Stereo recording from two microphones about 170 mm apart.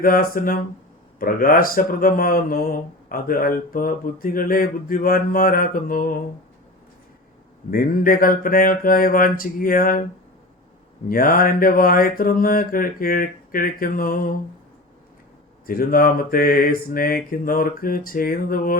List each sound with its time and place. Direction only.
0.0 s mantra: 55° left (ahead or behind)
7.7 s mantra: 55° left (ahead or behind)
11.1 s mantra: 55° left (ahead or behind)
15.6 s mantra: 60° left (ahead or behind)